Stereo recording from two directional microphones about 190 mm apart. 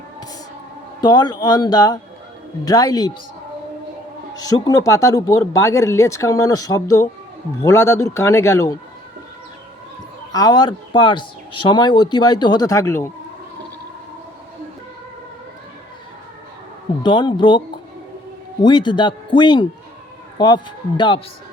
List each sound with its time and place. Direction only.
1.0 s speech: 20° left (ahead or behind)
4.4 s speech: 20° left (ahead or behind)
10.3 s speech: 20° left (ahead or behind)
17.0 s speech: 25° left (ahead or behind)
18.6 s speech: 25° left (ahead or behind)